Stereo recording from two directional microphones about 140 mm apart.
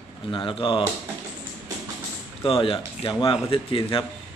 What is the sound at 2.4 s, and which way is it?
A man's voice, 40° left (ahead or behind).